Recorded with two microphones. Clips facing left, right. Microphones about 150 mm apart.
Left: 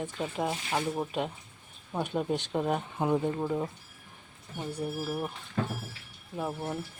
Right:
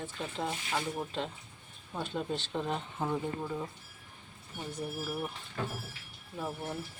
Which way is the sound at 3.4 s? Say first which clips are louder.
Left 6 dB; 35° left (ahead or behind).